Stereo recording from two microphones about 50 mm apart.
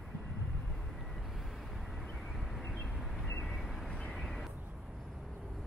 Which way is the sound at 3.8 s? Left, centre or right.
Left.